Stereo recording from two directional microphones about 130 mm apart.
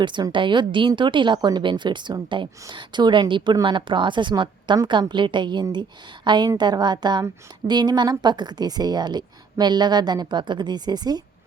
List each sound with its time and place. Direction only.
0.0 s a woman's voice: 35° right (ahead or behind)